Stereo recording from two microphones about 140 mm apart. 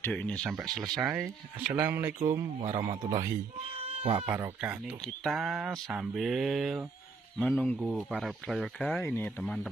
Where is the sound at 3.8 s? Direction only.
45° right (ahead or behind).